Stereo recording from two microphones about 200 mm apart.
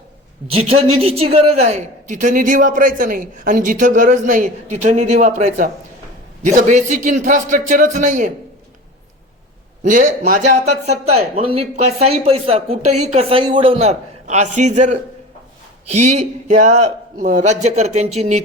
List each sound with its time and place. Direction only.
0.4 s a man's voice: 30° right (ahead or behind)
9.8 s speech: 40° right (ahead or behind)